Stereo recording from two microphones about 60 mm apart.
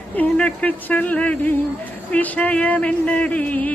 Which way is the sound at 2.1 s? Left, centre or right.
Left.